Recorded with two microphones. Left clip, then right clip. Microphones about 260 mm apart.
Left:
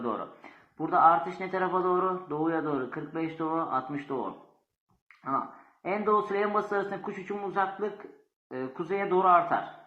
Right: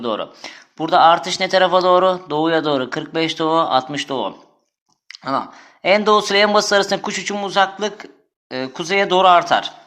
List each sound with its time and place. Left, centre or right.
0.0 s speech: right
5.8 s speech: right